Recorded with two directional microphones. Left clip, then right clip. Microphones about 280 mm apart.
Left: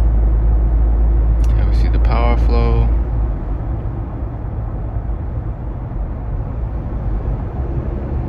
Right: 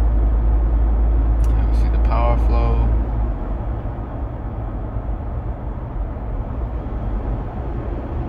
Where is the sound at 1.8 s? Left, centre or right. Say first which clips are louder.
Left 2 dB; left.